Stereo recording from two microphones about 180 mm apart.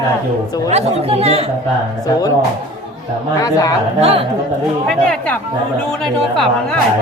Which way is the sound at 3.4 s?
20° left (ahead or behind).